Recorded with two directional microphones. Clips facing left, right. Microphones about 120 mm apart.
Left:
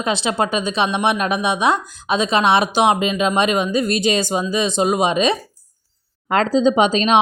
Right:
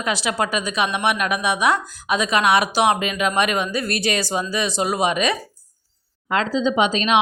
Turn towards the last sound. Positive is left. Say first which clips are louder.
# left 4 dB
turn(degrees=35)  # may be behind; listen again after turning